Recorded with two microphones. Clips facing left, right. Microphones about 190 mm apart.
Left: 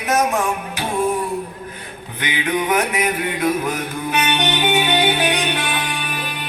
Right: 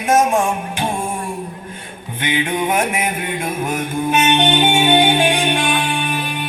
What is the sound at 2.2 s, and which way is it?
Mantra, 25° right (ahead or behind).